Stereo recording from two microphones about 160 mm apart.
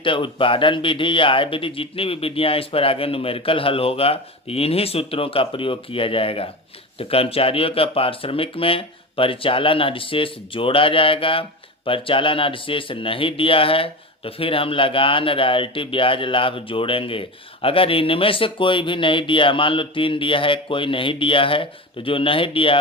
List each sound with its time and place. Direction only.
0.0 s speech: 30° left (ahead or behind)